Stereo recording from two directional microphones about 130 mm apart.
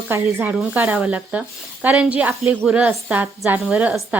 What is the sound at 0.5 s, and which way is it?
A woman's voice, centre (ahead or behind).